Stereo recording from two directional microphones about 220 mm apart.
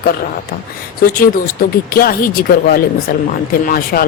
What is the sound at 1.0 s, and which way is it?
Speech, 40° left (ahead or behind).